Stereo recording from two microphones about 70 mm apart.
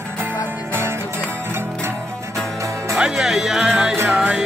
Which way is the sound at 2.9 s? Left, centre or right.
Centre.